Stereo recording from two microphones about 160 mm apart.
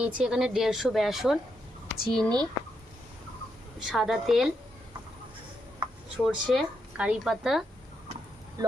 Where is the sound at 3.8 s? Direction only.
Centre (ahead or behind).